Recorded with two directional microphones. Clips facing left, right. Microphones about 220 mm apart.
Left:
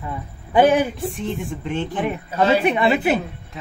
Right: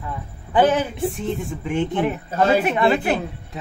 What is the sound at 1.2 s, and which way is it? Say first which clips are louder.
A woman's voice: right 1 dB; 5° right (ahead or behind).